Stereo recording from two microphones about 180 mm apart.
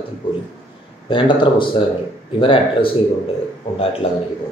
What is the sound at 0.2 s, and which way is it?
Speech, 25° left (ahead or behind).